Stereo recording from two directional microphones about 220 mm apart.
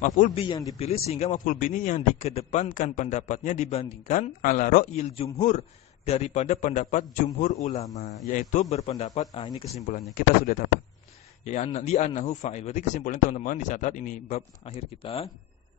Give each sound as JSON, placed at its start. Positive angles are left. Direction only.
{"t": 0.0, "sound": "speech", "side_deg": 30}
{"t": 0.7, "sound": "a man's voice", "side_deg": 30}
{"t": 9.8, "sound": "a man's voice", "side_deg": 35}